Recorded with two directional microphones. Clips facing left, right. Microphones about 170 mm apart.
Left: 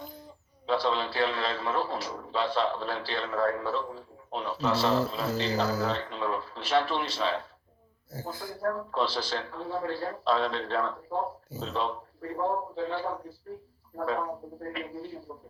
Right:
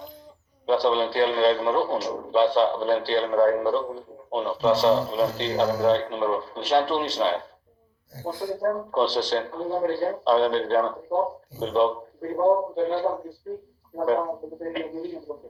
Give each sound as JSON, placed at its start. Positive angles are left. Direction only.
{"t": 0.7, "sound": "a man's voice", "side_deg": -30}
{"t": 8.2, "sound": "speech", "side_deg": -15}
{"t": 8.6, "sound": "a man's voice", "side_deg": -30}